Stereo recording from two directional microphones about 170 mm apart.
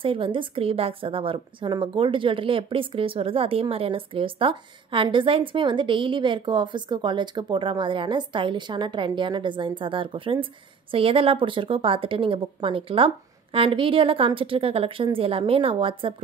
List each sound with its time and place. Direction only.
0.0 s a woman's voice: 30° right (ahead or behind)